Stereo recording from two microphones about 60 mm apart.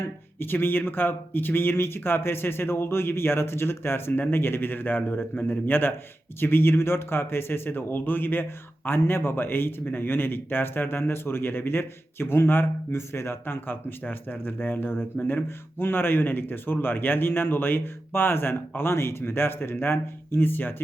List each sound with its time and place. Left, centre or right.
0.3 s speech: left